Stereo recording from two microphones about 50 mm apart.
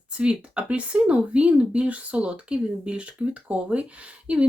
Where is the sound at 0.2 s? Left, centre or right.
Right.